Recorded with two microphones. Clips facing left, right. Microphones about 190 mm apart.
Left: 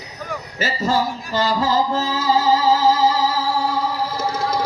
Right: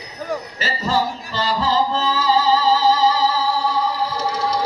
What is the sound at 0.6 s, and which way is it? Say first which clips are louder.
Music: left 2 dB; 45° left (ahead or behind).